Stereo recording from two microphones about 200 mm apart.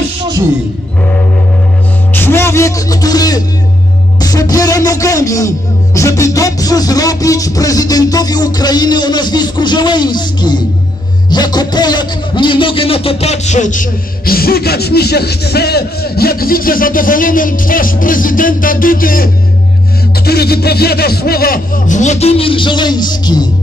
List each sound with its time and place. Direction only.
2.1 s music: 10° left (ahead or behind)
11.2 s a man's voice: 20° left (ahead or behind)